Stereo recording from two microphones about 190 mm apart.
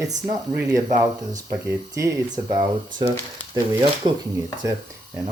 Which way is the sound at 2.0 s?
15° right (ahead or behind).